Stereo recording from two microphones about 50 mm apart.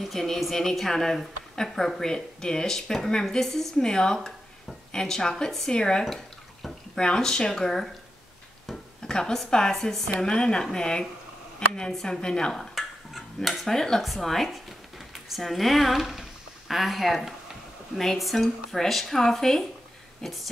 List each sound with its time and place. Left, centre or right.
0.0 s a woman's voice: centre
6.0 s bathtub: centre
7.0 s a woman's voice: centre
9.0 s a woman's voice: centre
10.2 s a woman's voice: centre
12.7 s dishes: centre
14.1 s speech: centre